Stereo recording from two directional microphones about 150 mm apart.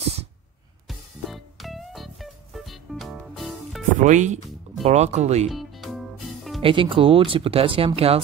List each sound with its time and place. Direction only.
0.8 s music: centre (ahead or behind)
4.0 s speech: 55° right (ahead or behind)
5.5 s music: centre (ahead or behind)
6.6 s speech: 35° right (ahead or behind)